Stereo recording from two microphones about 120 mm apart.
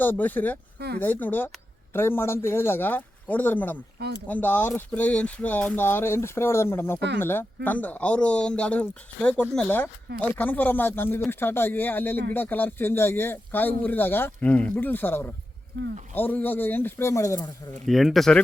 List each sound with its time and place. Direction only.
0.0 s speech: 15° left (ahead or behind)
17.8 s speech: centre (ahead or behind)